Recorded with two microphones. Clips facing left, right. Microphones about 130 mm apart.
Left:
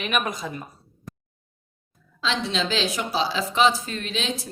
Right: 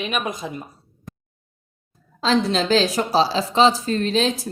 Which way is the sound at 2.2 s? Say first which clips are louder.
Right 7 dB; 40° right (ahead or behind).